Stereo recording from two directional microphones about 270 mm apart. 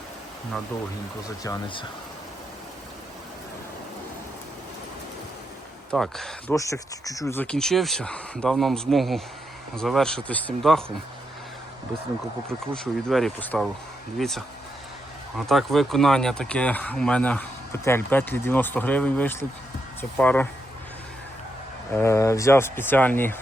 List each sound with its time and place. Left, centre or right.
1.5 s speech: centre
5.9 s speech: centre
12.5 s speech: centre
21.9 s speech: centre